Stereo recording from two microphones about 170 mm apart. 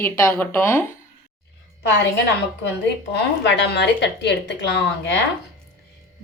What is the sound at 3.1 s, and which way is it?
A woman's voice, 90° left.